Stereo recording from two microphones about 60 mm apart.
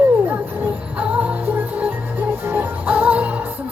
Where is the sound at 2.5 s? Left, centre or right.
Right.